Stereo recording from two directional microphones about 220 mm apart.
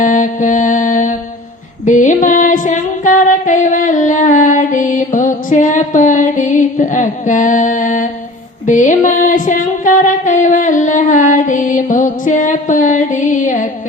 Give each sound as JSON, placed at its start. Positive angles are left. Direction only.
{"t": 0.0, "sound": "music", "side_deg": 35}